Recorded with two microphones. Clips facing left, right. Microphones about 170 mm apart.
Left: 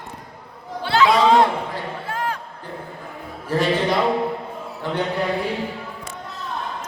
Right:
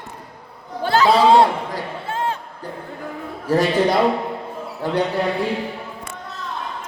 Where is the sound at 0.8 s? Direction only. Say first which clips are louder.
Right 2 dB; 40° right (ahead or behind).